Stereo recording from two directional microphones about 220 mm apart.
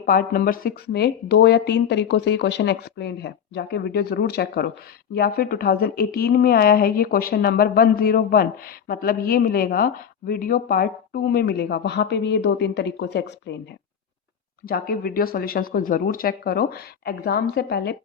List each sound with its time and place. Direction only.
0.0 s speech: 40° left (ahead or behind)
14.7 s speech: 45° left (ahead or behind)